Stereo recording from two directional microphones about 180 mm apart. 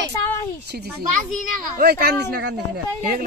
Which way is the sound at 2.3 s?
70° right (ahead or behind).